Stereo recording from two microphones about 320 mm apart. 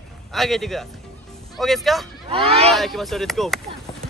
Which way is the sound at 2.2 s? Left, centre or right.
Centre.